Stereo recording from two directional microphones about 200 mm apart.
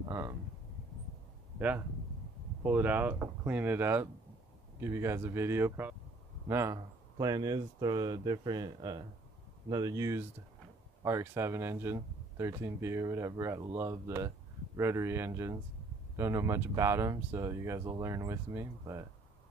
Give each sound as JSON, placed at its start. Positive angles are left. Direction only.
{"t": 0.0, "sound": "speech", "side_deg": -15}
{"t": 2.6, "sound": "speech", "side_deg": -10}